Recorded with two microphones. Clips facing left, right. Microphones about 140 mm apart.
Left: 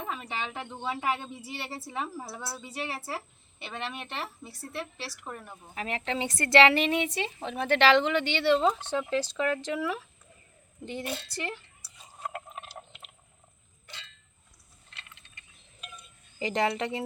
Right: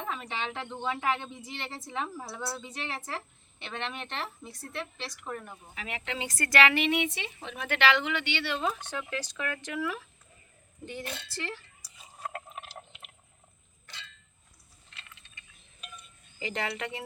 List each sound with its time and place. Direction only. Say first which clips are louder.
0.0 s speech: even; 5° left (ahead or behind)
5.7 s speech: left 6 dB; 35° left (ahead or behind)
6.1 s speech: left 5 dB; 25° left (ahead or behind)
11.3 s speech: left 2 dB; 20° left (ahead or behind)
12.2 s a sound: left 1 dB; centre (ahead or behind)
16.4 s speech: left 6 dB; 35° left (ahead or behind)